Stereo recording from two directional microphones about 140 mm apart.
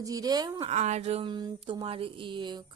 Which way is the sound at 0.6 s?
55° right (ahead or behind).